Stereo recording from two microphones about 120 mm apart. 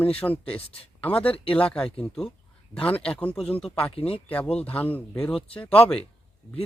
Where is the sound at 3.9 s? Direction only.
50° left (ahead or behind).